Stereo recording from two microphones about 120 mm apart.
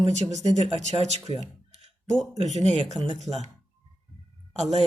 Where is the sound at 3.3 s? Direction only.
15° right (ahead or behind).